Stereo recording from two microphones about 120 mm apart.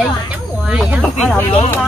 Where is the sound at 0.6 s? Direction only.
5° right (ahead or behind).